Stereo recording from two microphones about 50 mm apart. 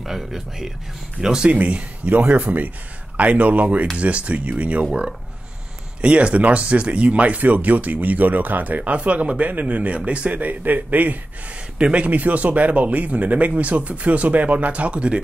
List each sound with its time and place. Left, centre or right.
0.0 s speech: centre
1.2 s speech: centre
5.9 s speech: right